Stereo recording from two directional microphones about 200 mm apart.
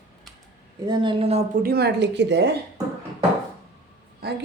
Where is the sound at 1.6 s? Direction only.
50° right (ahead or behind).